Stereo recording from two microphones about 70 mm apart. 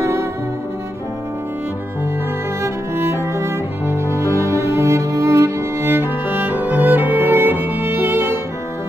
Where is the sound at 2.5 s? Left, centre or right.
Right.